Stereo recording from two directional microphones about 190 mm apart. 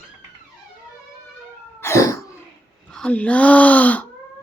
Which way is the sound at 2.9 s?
5° left (ahead or behind).